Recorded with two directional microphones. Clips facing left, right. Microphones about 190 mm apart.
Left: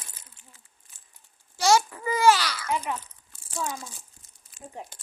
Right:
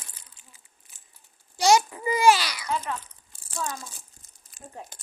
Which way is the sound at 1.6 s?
15° right (ahead or behind).